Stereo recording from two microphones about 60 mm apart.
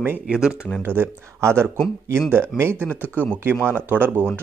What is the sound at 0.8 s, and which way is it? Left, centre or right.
Speech, right.